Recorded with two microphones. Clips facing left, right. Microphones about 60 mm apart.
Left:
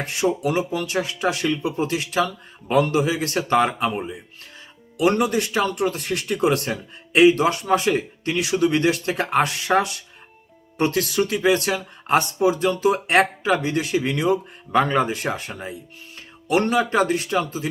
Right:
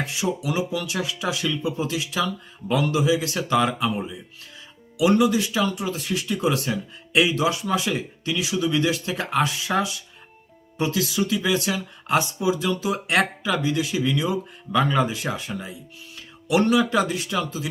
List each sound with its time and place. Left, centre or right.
0.0 s speech: left